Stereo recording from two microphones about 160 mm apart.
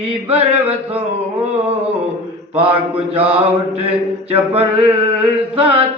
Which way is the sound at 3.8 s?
35° right (ahead or behind).